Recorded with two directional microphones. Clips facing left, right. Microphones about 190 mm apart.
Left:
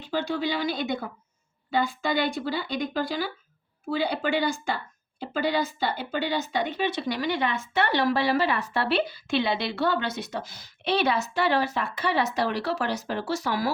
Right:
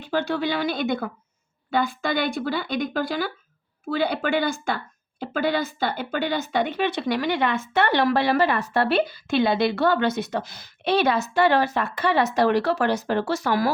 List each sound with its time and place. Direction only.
0.1 s speech: 55° right (ahead or behind)